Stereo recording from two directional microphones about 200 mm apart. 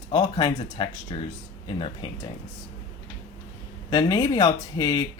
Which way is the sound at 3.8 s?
20° left (ahead or behind).